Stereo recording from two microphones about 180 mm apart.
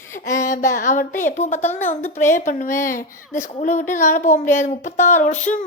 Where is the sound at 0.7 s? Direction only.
45° left (ahead or behind).